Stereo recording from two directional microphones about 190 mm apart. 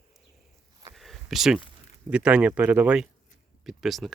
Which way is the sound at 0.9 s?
Centre (ahead or behind).